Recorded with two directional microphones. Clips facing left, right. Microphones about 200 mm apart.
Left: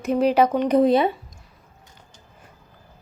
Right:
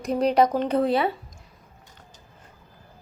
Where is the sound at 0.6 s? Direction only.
15° left (ahead or behind).